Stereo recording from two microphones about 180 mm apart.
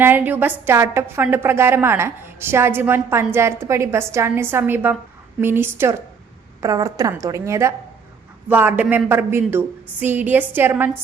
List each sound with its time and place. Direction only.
0.0 s a woman's voice: 10° right (ahead or behind)